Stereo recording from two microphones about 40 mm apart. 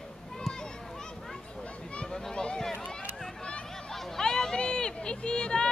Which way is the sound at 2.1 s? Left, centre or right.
Centre.